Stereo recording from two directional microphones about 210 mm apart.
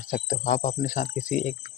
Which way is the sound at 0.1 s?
35° left (ahead or behind).